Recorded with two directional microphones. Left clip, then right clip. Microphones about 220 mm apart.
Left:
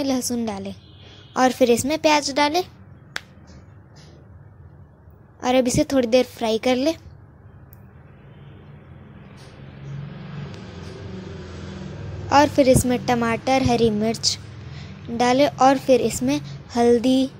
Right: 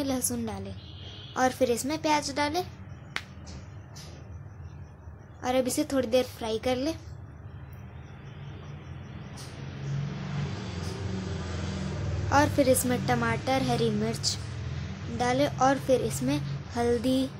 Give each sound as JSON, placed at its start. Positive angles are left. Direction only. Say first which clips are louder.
{"t": 0.0, "sound": "a woman's voice", "louder": "left 7 dB", "side_deg": 25}
{"t": 5.4, "sound": "a woman's voice", "louder": "left 8 dB", "side_deg": 30}
{"t": 12.3, "sound": "a woman's voice", "louder": "left 8 dB", "side_deg": 30}